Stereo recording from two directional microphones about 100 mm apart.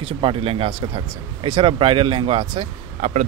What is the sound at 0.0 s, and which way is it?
Speech, 65° right (ahead or behind).